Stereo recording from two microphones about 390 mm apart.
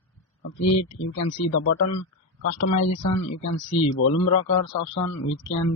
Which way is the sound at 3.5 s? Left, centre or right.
Left.